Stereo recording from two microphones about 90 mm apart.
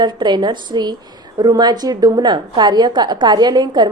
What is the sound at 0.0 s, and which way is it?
A woman's voice, 55° right (ahead or behind).